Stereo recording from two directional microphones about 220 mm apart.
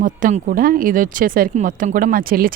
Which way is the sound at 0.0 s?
40° right (ahead or behind).